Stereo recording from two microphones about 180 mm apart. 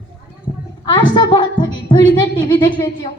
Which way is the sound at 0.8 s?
25° left (ahead or behind).